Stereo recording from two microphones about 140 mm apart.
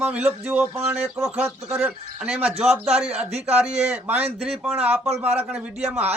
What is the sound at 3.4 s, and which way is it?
Speech, 50° right (ahead or behind).